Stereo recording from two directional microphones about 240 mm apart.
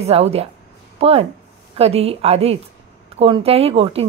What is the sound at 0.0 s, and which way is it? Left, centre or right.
Speech, right.